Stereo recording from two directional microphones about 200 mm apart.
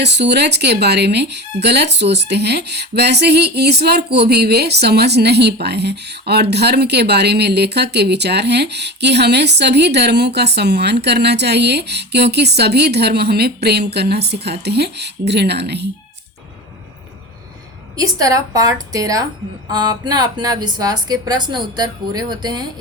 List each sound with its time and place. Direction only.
0.0 s speech: 60° right (ahead or behind)
17.9 s a woman's voice: 15° right (ahead or behind)